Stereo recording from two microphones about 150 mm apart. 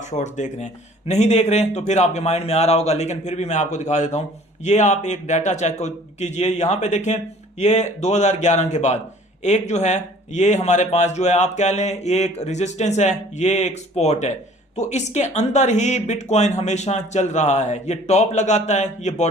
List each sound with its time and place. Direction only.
0.1 s a man's voice: 55° left (ahead or behind)